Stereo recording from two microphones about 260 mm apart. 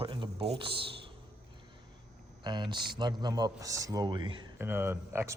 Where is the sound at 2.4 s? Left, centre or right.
Centre.